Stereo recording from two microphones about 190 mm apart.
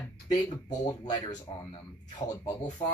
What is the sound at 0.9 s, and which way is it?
Speech, 20° left (ahead or behind).